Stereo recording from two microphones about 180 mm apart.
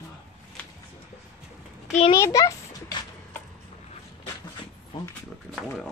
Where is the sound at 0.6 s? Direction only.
5° left (ahead or behind).